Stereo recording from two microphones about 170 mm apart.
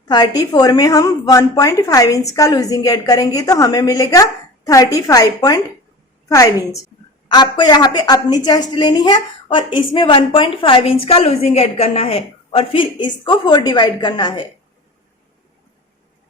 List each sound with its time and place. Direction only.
0.1 s a woman's voice: 25° left (ahead or behind)